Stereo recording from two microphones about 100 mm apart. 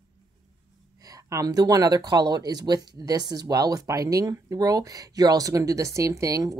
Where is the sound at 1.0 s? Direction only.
35° right (ahead or behind).